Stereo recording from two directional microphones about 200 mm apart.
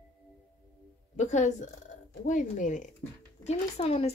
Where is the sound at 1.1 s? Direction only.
35° left (ahead or behind).